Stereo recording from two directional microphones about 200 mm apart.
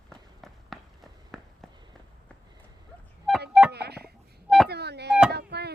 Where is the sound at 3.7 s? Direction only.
55° right (ahead or behind).